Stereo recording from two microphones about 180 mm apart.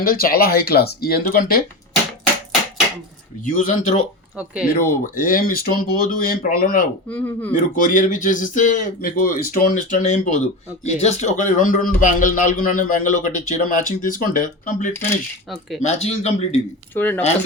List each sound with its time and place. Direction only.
0.0 s speech: 55° left (ahead or behind)
3.4 s speech: 45° left (ahead or behind)
4.4 s speech: 5° right (ahead or behind)
4.7 s speech: 50° left (ahead or behind)
7.1 s speech: 10° left (ahead or behind)
7.5 s a man's voice: 45° left (ahead or behind)
16.9 s speech: 10° left (ahead or behind)